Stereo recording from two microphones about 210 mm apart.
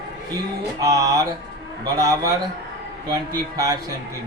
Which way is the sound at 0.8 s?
15° right (ahead or behind).